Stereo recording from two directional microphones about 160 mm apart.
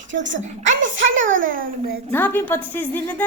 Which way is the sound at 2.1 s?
10° left (ahead or behind).